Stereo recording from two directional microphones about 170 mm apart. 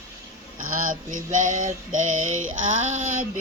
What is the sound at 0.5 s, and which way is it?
Female singing, 50° right (ahead or behind).